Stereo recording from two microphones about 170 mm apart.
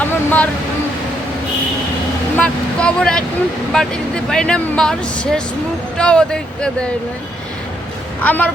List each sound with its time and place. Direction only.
0.0 s a sound: 10° left (ahead or behind)
2.4 s speech: 5° left (ahead or behind)
8.2 s a woman's voice: 10° left (ahead or behind)